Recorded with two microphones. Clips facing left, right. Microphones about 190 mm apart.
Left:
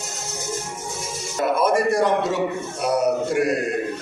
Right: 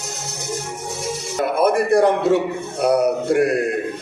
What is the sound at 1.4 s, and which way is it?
A man's voice, 60° right (ahead or behind).